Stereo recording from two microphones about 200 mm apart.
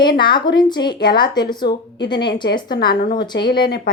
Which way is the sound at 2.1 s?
55° left (ahead or behind).